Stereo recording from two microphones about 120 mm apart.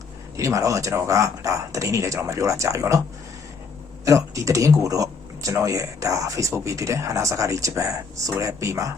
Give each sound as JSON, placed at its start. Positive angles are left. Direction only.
{"t": 0.3, "sound": "speech", "side_deg": -25}
{"t": 4.0, "sound": "speech", "side_deg": -25}